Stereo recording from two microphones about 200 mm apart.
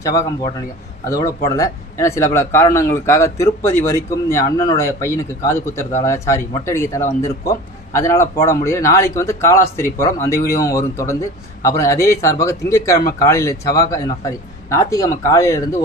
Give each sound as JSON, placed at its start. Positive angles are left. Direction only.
{"t": 1.5, "sound": "speech", "side_deg": 15}
{"t": 10.4, "sound": "speech", "side_deg": 50}
{"t": 10.7, "sound": "speech", "side_deg": 15}